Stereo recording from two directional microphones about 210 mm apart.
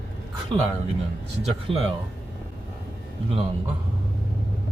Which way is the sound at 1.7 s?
25° right (ahead or behind).